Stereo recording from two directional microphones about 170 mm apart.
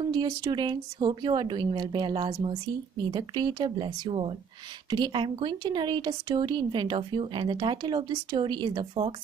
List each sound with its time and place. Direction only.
0.0 s speech: 25° right (ahead or behind)